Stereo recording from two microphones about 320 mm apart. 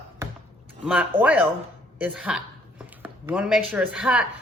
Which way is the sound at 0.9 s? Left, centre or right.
Centre.